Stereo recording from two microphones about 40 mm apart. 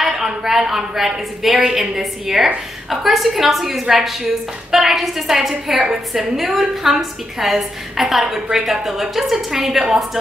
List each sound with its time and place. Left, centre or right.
0.0 s a woman's voice: centre
6.3 s a woman's voice: centre